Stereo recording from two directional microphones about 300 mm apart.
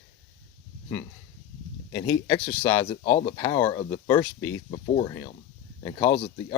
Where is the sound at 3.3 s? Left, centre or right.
Centre.